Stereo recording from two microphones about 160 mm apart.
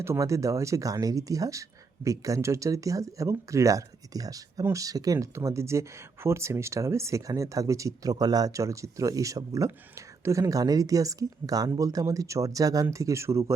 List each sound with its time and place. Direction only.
0.0 s speech: 20° right (ahead or behind)